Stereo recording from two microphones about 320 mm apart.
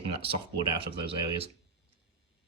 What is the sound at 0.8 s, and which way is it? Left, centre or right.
Speech, centre.